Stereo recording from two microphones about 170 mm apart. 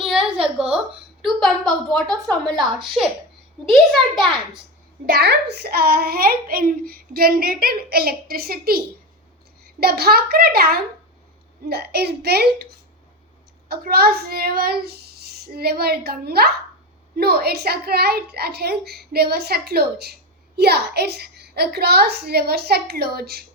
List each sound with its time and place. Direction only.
0.0 s a sound: 5° right (ahead or behind)
0.4 s a woman's voice: 5° right (ahead or behind)
5.0 s a child's voice: 65° right (ahead or behind)
9.8 s a child's voice: 65° right (ahead or behind)
13.7 s a child's voice: 65° right (ahead or behind)